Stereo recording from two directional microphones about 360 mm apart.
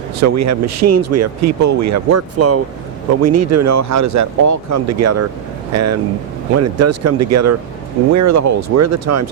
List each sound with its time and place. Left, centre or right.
0.2 s speech: right